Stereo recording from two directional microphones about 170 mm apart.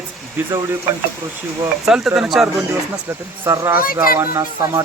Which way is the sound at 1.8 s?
5° right (ahead or behind).